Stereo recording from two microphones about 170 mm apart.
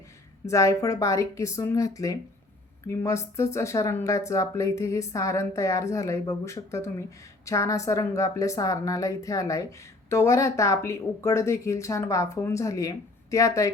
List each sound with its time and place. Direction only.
0.4 s a woman's voice: 20° left (ahead or behind)